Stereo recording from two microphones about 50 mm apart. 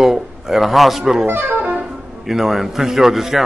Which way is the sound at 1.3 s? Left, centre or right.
Right.